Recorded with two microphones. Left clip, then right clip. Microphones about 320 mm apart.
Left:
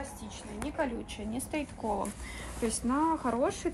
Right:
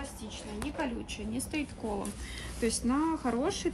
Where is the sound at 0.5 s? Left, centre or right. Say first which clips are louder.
Left 2 dB; centre.